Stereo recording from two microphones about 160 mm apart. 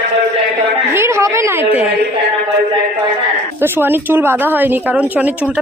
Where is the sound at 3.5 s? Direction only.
15° right (ahead or behind).